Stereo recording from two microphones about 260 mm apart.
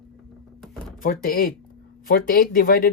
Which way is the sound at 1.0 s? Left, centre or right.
Left.